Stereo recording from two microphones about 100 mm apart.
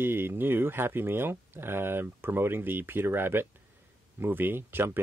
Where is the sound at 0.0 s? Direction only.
20° right (ahead or behind).